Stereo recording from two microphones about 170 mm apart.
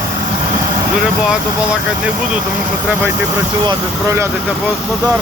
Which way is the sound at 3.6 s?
15° right (ahead or behind).